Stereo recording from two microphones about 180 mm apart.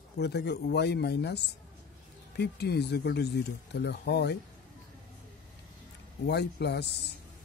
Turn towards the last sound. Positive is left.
turn(degrees=70)  # may be behind; listen again after turning